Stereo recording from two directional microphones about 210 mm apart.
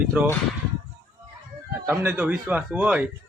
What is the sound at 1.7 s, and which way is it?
Speech, 10° right (ahead or behind).